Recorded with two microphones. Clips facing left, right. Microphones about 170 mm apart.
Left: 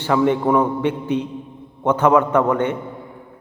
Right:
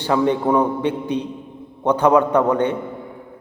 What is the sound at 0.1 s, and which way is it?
A man's voice, 20° right (ahead or behind).